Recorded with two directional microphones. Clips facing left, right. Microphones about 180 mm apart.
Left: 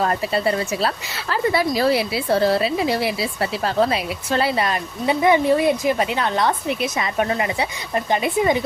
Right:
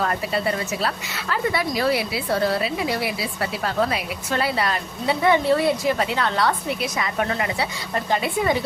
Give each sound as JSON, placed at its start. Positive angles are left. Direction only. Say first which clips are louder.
{"t": 0.0, "sound": "a woman's voice", "louder": "left 3 dB", "side_deg": 30}